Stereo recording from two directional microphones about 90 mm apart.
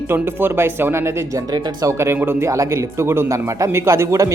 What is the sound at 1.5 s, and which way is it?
Speech, 50° right (ahead or behind).